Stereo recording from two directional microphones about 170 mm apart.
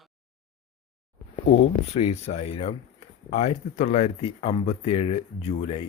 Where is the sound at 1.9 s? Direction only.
40° left (ahead or behind).